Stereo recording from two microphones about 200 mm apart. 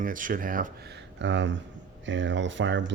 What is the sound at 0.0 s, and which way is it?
Speech, 40° right (ahead or behind).